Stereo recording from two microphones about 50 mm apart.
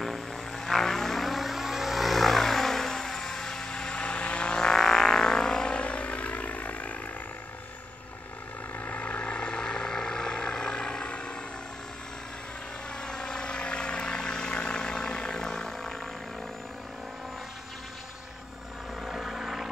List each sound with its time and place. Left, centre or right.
0.0 s vehicle: centre; by 7.0 s left
8.7 s vehicle: left
13.0 s vehicle: centre
19.0 s helicopter: centre